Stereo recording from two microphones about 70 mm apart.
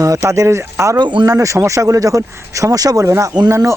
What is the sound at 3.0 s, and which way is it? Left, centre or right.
Speech, right.